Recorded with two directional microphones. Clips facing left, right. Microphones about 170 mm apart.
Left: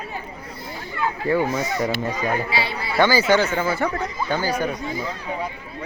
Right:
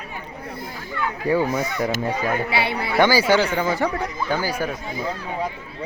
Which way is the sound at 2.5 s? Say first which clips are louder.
Right 2 dB; 60° right (ahead or behind).